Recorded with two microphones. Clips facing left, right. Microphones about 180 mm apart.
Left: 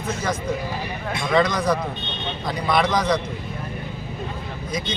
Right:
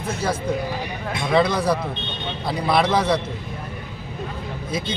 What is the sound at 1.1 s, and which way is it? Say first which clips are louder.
Speech: right 1 dB; 10° right (ahead or behind).